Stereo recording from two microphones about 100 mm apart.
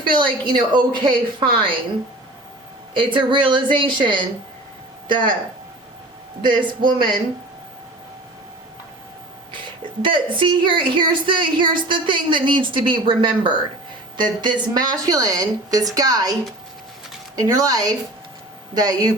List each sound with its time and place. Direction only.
0.0 s a woman's voice: 50° right (ahead or behind)
2.9 s speech: 55° right (ahead or behind)
6.4 s a woman's voice: 50° right (ahead or behind)
9.5 s a woman's voice: 55° right (ahead or behind)